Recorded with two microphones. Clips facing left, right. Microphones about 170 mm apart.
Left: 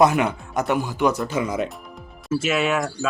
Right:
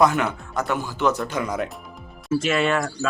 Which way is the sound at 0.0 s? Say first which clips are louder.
Left 2 dB; 20° left (ahead or behind).